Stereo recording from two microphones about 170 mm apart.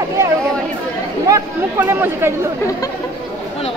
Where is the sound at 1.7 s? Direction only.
15° right (ahead or behind).